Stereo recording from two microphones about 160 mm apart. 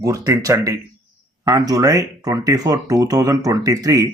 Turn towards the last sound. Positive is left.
turn(degrees=-20)  # may be behind; listen again after turning